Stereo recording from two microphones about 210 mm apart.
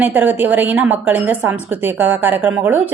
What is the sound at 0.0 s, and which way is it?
A woman's voice, 10° right (ahead or behind).